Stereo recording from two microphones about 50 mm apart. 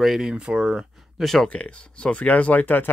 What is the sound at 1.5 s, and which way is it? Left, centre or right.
Speech, left.